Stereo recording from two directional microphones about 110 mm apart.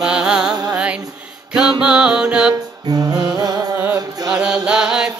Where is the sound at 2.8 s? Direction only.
35° right (ahead or behind).